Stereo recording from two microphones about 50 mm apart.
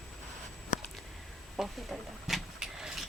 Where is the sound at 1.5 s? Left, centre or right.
Centre.